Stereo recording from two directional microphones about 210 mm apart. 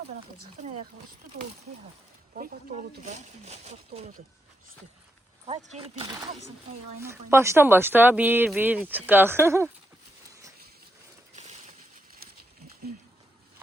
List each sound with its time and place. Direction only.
2.3 s speech: 40° right (ahead or behind)
5.5 s speech: 25° right (ahead or behind)
7.0 s speech: 10° right (ahead or behind)